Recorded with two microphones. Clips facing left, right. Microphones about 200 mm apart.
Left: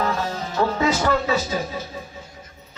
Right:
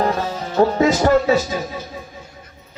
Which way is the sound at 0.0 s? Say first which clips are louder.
Right 4 dB; 40° right (ahead or behind).